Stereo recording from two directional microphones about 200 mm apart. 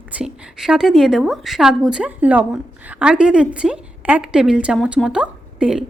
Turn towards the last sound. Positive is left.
turn(degrees=-5)  # may be behind; listen again after turning